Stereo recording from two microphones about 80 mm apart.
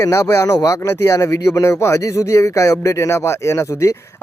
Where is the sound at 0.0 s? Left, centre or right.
Left.